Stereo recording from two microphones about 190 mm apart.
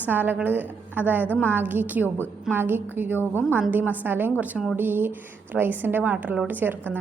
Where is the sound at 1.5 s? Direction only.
10° right (ahead or behind).